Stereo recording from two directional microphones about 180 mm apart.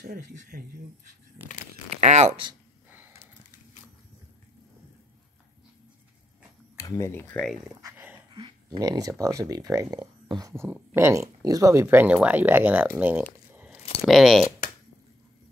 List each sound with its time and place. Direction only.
0.0 s speech: 55° right (ahead or behind)
1.9 s a sound: 40° right (ahead or behind)
6.8 s speech: 15° left (ahead or behind)
7.8 s dog: 10° right (ahead or behind)
8.3 s speech: 25° right (ahead or behind); by 13.2 s 10° right (ahead or behind)
14.0 s speech: centre (ahead or behind)